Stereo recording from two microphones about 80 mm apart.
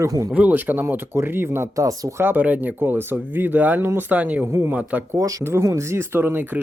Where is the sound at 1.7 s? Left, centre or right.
Right.